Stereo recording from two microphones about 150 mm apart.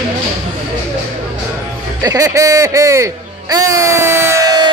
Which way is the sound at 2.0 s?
20° right (ahead or behind).